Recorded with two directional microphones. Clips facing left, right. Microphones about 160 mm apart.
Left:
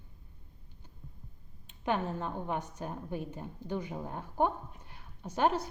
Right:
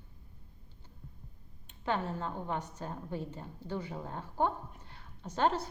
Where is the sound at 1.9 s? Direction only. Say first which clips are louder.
Left 2 dB; 15° left (ahead or behind).